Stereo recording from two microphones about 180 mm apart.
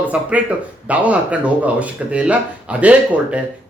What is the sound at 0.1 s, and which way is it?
Speech, 5° right (ahead or behind).